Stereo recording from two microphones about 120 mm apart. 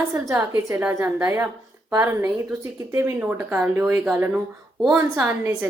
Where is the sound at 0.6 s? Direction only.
25° right (ahead or behind).